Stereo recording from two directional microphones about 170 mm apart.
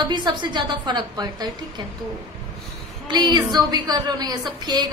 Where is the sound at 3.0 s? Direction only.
25° right (ahead or behind).